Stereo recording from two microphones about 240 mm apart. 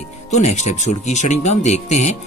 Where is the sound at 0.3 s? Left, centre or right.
Left.